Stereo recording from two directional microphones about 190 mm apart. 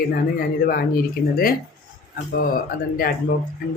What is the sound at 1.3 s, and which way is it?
Speech, 50° left (ahead or behind).